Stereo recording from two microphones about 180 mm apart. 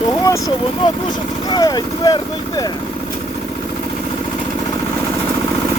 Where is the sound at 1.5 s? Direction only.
20° left (ahead or behind).